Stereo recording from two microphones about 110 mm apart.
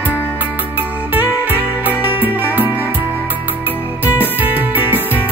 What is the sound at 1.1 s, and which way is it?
Music, 15° right (ahead or behind).